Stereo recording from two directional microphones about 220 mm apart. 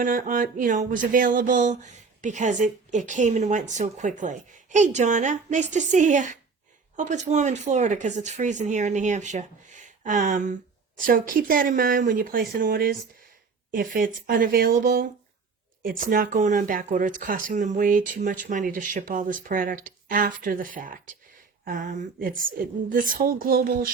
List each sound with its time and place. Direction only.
0.0 s speech: 40° right (ahead or behind)